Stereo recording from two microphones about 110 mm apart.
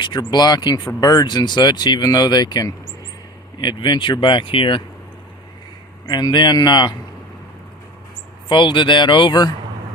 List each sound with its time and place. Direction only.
0.0 s speech: 40° left (ahead or behind)
6.1 s speech: 40° left (ahead or behind)
8.4 s speech: 45° left (ahead or behind)